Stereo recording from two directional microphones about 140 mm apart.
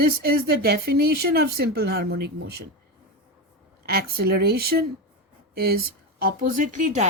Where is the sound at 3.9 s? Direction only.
90° right.